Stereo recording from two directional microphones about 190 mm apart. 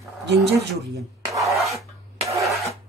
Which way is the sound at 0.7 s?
Centre (ahead or behind).